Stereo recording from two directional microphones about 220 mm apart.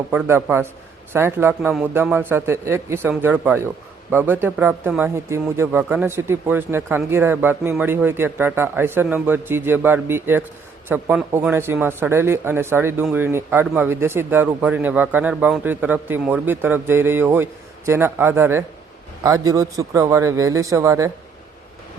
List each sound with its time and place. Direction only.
0.1 s a man's voice: 10° right (ahead or behind)